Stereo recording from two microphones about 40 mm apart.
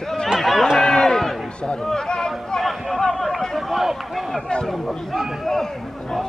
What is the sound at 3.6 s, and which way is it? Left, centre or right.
Speech, centre.